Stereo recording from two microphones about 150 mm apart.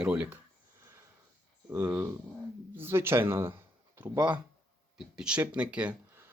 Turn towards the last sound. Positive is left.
turn(degrees=-10)  # may be behind; listen again after turning